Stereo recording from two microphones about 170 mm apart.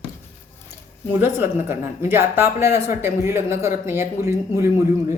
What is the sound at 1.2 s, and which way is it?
Speech, 15° right (ahead or behind).